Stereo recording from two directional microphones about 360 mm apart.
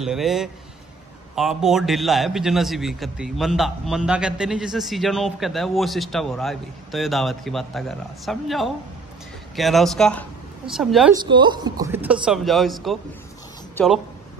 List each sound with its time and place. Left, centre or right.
0.0 s a man's voice: centre
1.6 s a man's voice: centre
11.1 s a man's voice: centre